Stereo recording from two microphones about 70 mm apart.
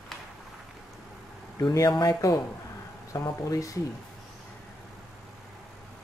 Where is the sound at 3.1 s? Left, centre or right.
Left.